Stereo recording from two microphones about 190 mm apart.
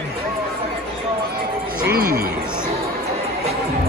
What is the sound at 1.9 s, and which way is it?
Speech, 55° right (ahead or behind).